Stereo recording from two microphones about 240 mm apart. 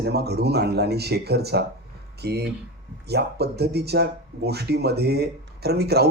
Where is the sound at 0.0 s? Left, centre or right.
Right.